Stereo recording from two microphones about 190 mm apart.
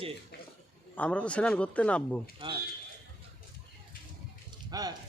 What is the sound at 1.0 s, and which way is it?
Speech, 5° left (ahead or behind).